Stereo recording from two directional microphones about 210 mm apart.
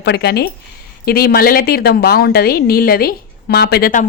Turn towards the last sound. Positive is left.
turn(degrees=40)  # may be behind; listen again after turning